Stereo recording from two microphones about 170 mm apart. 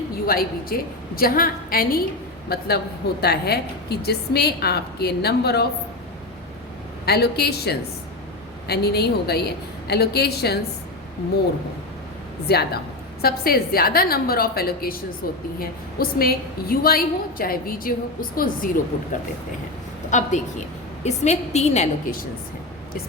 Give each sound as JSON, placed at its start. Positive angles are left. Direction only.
{"t": 0.3, "sound": "a woman's voice", "side_deg": 60}
{"t": 7.0, "sound": "a woman's voice", "side_deg": 70}
{"t": 12.5, "sound": "a woman's voice", "side_deg": 70}
{"t": 20.1, "sound": "a woman's voice", "side_deg": 45}